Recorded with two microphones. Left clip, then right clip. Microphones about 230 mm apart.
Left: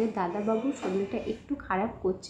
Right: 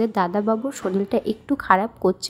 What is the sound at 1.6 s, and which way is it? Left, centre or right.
Speech, right.